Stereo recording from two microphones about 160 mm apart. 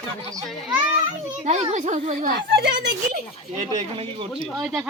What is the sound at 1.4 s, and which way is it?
A woman's voice, 45° right (ahead or behind).